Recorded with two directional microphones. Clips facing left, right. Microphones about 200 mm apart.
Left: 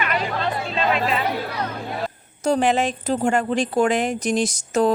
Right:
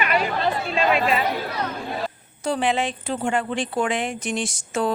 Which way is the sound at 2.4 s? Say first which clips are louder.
Left 4 dB; 45° left (ahead or behind).